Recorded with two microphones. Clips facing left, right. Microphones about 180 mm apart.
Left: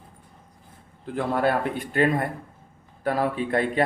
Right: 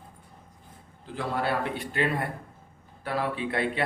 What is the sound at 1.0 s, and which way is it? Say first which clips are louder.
A man's voice: left 6 dB; 50° left (ahead or behind).